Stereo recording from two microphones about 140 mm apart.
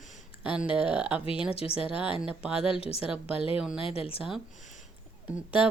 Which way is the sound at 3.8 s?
40° left (ahead or behind).